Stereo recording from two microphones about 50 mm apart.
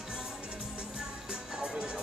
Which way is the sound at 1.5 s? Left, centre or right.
Centre.